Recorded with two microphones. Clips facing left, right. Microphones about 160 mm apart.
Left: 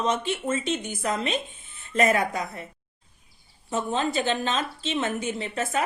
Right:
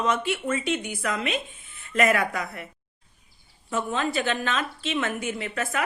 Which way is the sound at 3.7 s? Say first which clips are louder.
Left 1 dB; 20° left (ahead or behind).